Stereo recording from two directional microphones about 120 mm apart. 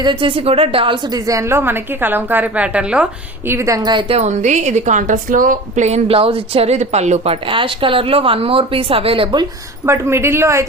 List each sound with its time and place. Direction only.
0.0 s a woman's voice: 45° right (ahead or behind); by 3.1 s 10° right (ahead or behind)
3.4 s a woman's voice: 20° right (ahead or behind)
4.1 s a woman's voice: 75° right (ahead or behind)
7.4 s speech: 45° right (ahead or behind)
9.8 s a woman's voice: 20° right (ahead or behind)